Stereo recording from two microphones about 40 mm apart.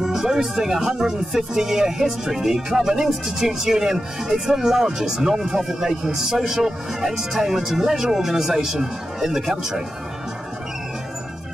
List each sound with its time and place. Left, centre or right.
0.0 s speech: centre